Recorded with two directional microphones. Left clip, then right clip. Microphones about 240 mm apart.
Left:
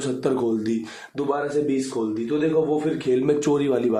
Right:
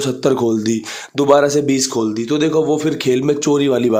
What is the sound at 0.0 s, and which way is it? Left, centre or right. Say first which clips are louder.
Speech: right 7 dB; right.